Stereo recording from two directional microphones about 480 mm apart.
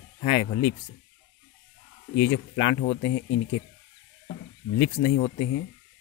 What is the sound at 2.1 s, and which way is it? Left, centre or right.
Speech, left.